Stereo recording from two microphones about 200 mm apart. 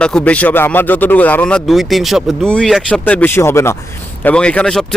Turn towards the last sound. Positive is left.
turn(degrees=5)  # may be behind; listen again after turning